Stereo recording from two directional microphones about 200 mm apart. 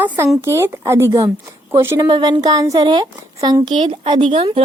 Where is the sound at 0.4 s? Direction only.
15° right (ahead or behind).